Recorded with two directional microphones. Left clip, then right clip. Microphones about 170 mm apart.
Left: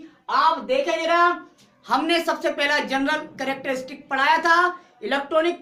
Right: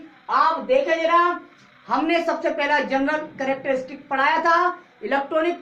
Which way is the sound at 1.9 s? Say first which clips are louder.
Even; 20° left (ahead or behind).